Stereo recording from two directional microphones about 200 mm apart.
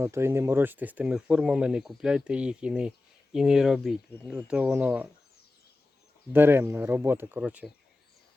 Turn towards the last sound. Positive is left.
turn(degrees=-5)  # may be behind; listen again after turning